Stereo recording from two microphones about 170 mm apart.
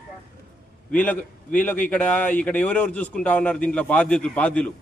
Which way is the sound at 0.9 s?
10° left (ahead or behind).